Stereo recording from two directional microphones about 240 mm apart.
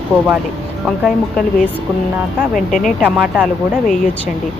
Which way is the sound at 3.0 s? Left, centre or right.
Centre.